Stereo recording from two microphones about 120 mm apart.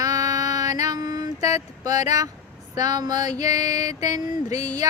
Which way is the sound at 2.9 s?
35° right (ahead or behind).